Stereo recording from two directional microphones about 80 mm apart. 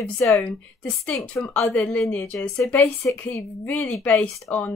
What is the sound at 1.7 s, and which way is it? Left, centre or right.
Speech, centre.